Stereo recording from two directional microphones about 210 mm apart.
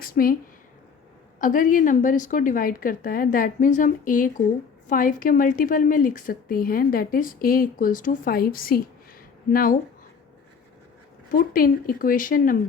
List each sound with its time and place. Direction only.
0.0 s a sound: 45° left (ahead or behind)
1.4 s a woman's voice: 40° left (ahead or behind)
11.3 s speech: 40° left (ahead or behind)